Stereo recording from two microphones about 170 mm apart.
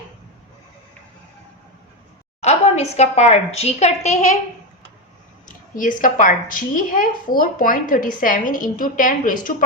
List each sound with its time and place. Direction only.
2.4 s a woman's voice: 40° left (ahead or behind)
5.5 s a woman's voice: 50° left (ahead or behind)